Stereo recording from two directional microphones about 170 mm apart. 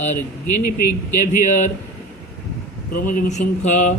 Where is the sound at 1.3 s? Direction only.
45° left (ahead or behind).